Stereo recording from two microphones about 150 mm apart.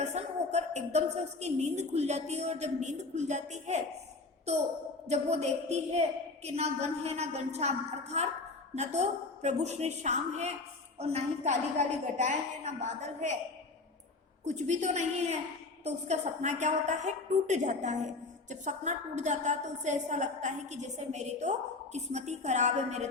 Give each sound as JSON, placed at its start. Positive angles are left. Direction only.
{"t": 0.0, "sound": "a woman's voice", "side_deg": -50}
{"t": 5.0, "sound": "a woman's voice", "side_deg": -45}
{"t": 14.4, "sound": "a woman's voice", "side_deg": -50}